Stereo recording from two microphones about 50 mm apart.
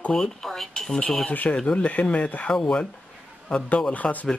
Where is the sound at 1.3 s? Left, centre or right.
Left.